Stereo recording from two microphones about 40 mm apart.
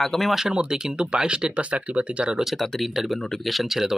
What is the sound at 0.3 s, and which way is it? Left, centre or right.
Speech, centre.